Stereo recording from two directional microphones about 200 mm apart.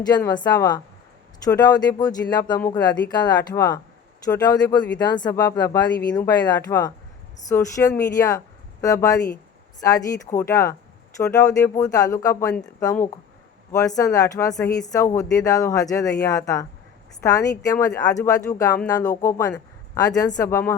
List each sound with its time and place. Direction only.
0.3 s speech: 20° left (ahead or behind)